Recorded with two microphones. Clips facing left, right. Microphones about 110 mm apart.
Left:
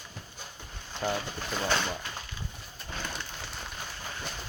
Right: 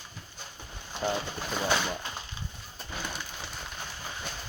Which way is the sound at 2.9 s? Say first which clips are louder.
Right 1 dB; 10° right (ahead or behind).